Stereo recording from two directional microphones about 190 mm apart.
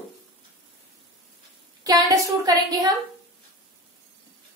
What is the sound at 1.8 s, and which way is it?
A woman's voice, 20° right (ahead or behind).